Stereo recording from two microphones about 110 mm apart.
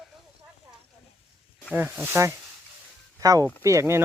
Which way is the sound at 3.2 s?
30° right (ahead or behind).